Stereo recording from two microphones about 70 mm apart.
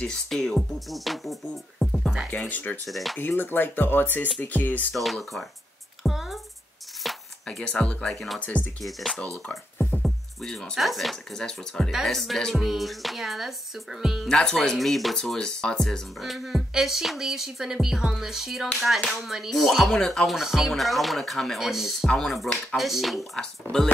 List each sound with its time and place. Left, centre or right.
0.0 s speech: centre
2.3 s speech: left
2.9 s speech: centre
3.2 s speech: left
4.9 s speech: centre
6.0 s music: centre
7.4 s speech: centre
8.4 s speech: left
10.0 s speech: centre
14.3 s speech: centre
16.2 s speech: centre
23.3 s speech: centre